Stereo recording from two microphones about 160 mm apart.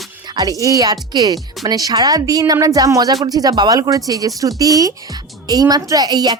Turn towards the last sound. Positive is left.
turn(degrees=-25)  # may be behind; listen again after turning